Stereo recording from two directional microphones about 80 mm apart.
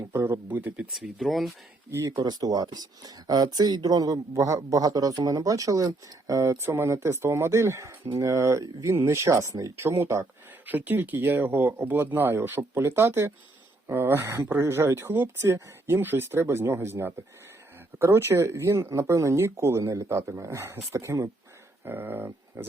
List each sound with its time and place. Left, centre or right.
0.0 s speech: right
0.4 s speech: right
0.9 s speech: centre
1.9 s speech: right
2.1 s speech: right
10.7 s speech: right
21.8 s speech: right